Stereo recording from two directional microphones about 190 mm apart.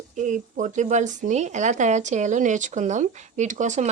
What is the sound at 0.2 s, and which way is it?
Speech, 40° right (ahead or behind).